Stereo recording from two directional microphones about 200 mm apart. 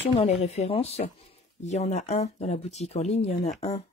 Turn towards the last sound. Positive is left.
turn(degrees=35)  # may be behind; listen again after turning